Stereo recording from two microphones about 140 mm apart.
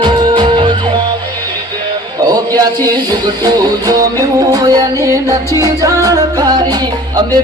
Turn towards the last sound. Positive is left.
turn(degrees=-25)  # may be behind; listen again after turning